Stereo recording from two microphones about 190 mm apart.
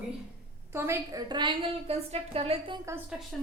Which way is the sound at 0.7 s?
15° right (ahead or behind).